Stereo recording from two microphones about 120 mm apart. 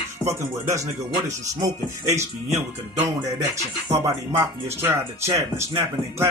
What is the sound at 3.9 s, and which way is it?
Speech, 20° right (ahead or behind).